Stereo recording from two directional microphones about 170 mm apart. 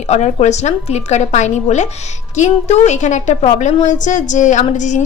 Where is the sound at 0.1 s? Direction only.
40° left (ahead or behind).